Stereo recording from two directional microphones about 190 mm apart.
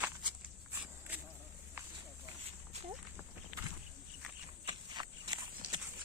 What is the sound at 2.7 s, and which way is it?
Walk, 35° right (ahead or behind).